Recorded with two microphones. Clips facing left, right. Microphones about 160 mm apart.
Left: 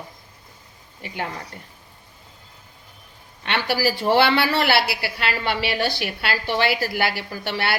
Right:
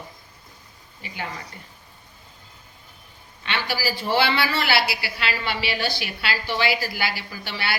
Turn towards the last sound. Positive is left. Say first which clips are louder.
# left 5 dB
turn(degrees=60)  # may be behind; listen again after turning